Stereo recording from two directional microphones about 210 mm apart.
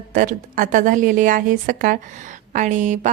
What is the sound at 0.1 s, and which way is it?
A woman's voice, 40° right (ahead or behind).